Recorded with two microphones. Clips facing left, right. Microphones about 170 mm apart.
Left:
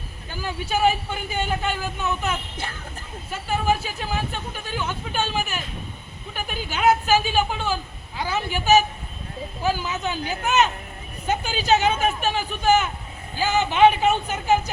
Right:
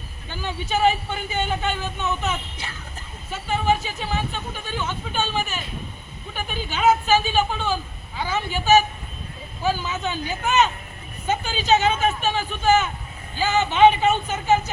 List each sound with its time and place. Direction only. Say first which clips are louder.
0.3 s speech: even; 10° left (ahead or behind)
3.3 s speech: right 1 dB; 10° left (ahead or behind)